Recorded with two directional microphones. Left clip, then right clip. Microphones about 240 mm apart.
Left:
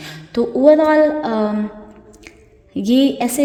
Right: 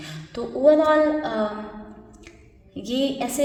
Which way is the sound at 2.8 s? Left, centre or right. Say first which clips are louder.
Left 9 dB; left.